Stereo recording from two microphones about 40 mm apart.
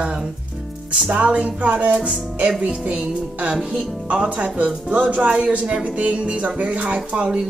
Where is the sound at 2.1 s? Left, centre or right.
Right.